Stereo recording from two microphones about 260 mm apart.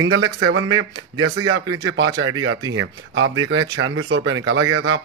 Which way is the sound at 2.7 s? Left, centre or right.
Right.